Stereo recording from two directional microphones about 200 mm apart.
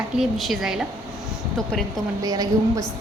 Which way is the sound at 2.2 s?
20° right (ahead or behind).